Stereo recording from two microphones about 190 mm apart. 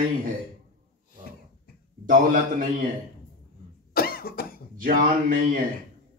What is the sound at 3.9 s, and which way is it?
Cough, 50° left (ahead or behind).